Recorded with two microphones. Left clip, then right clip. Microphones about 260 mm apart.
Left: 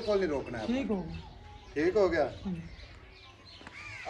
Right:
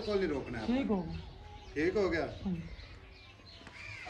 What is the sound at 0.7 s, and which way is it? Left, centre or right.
Speech, right.